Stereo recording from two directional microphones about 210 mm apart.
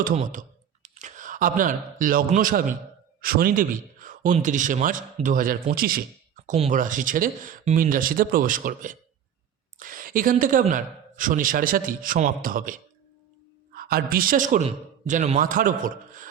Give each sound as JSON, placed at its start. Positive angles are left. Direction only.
{"t": 0.2, "sound": "speech", "side_deg": -35}
{"t": 13.7, "sound": "a woman's voice", "side_deg": -45}